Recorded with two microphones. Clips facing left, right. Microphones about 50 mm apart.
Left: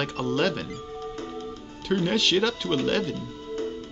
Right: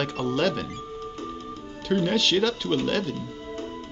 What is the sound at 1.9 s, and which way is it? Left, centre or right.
Speech, centre.